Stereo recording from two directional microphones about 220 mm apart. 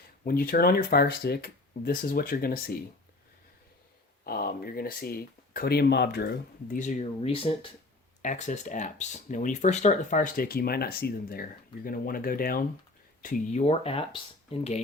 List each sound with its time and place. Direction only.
0.3 s speech: 40° left (ahead or behind)
4.2 s speech: 45° left (ahead or behind); by 14.8 s 25° left (ahead or behind)